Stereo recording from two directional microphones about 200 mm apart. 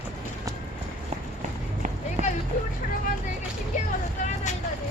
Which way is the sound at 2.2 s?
35° right (ahead or behind).